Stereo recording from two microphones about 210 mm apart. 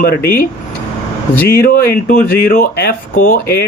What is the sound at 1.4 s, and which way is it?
Speech, 45° left (ahead or behind).